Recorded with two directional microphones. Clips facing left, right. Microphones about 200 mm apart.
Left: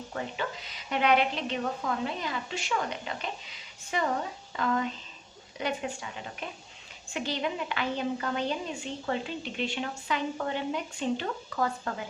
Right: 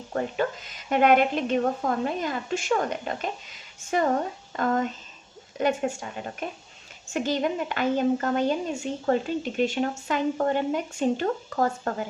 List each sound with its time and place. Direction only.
0.1 s a woman's voice: 45° right (ahead or behind)